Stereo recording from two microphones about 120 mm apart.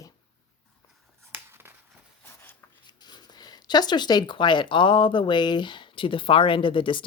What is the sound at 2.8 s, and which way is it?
Speech, 35° left (ahead or behind).